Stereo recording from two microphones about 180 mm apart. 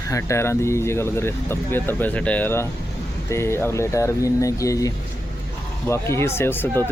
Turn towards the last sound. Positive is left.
turn(degrees=10)  # may be behind; listen again after turning